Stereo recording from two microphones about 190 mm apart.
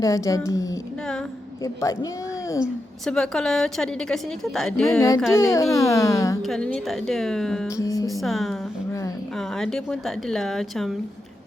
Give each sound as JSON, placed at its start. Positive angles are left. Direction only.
{"t": 0.0, "sound": "a woman's voice", "side_deg": 15}
{"t": 3.1, "sound": "a woman's voice", "side_deg": 0}
{"t": 4.9, "sound": "a woman's voice", "side_deg": 15}
{"t": 6.4, "sound": "a woman's voice", "side_deg": 5}
{"t": 7.8, "sound": "music", "side_deg": 15}
{"t": 8.1, "sound": "a woman's voice", "side_deg": 0}
{"t": 8.9, "sound": "a sound", "side_deg": 15}
{"t": 9.4, "sound": "a woman's voice", "side_deg": 0}